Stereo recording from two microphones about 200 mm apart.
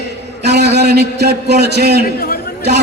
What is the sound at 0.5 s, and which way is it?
A man's voice, 55° right (ahead or behind).